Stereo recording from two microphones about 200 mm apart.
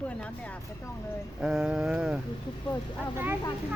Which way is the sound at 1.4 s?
5° right (ahead or behind).